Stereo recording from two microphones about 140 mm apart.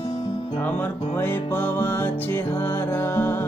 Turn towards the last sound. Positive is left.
turn(degrees=15)  # may be behind; listen again after turning